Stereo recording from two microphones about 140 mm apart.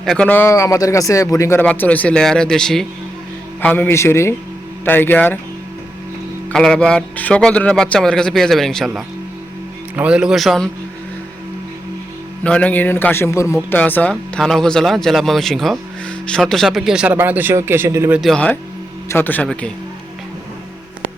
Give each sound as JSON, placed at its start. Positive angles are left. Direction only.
{"t": 0.0, "sound": "a man's voice", "side_deg": 5}
{"t": 6.5, "sound": "a man's voice", "side_deg": 5}
{"t": 9.9, "sound": "a man's voice", "side_deg": -10}
{"t": 12.4, "sound": "a man's voice", "side_deg": 10}
{"t": 18.1, "sound": "a man's voice", "side_deg": 0}